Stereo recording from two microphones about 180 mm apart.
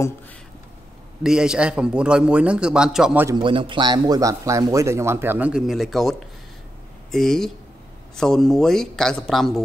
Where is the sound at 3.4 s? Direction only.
25° right (ahead or behind).